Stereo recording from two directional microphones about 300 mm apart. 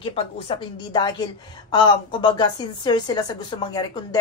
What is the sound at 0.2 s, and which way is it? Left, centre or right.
Speech, centre.